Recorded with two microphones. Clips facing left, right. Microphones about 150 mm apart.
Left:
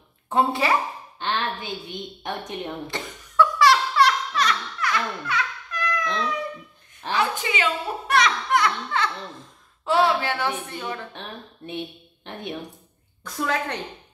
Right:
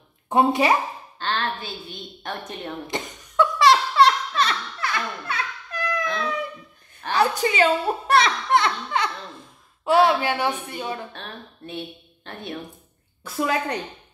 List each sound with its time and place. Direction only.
0.3 s a woman's voice: 15° right (ahead or behind)
1.2 s a woman's voice: 15° left (ahead or behind)
2.9 s laughter: 25° right (ahead or behind)
7.1 s speech: 40° right (ahead or behind)
9.8 s a woman's voice: 15° right (ahead or behind)
11.1 s a woman's voice: 15° left (ahead or behind)
13.2 s a woman's voice: 10° right (ahead or behind)